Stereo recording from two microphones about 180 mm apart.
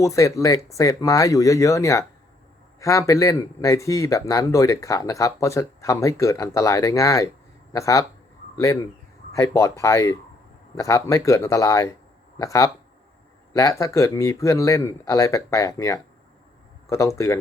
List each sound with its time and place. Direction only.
0.0 s speech: 15° left (ahead or behind)